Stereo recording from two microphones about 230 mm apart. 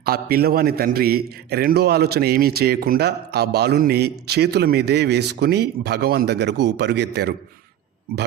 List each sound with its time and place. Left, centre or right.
0.0 s a man's voice: right